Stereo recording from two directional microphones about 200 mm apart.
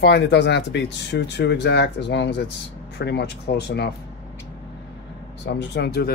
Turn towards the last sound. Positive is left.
turn(degrees=55)  # may be behind; listen again after turning